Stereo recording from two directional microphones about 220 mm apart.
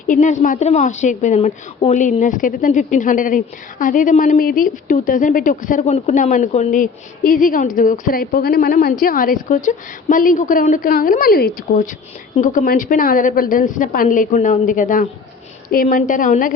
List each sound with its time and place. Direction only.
0.1 s a woman's voice: 35° left (ahead or behind)